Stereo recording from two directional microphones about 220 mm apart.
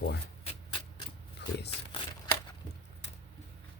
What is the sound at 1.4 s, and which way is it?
Speech, 50° left (ahead or behind).